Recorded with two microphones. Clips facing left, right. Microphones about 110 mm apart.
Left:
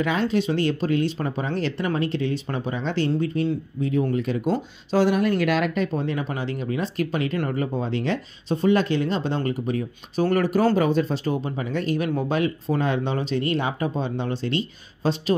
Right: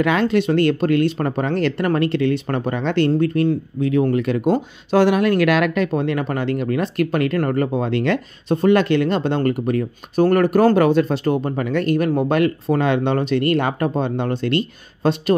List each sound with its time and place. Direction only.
0.0 s speech: 70° right (ahead or behind)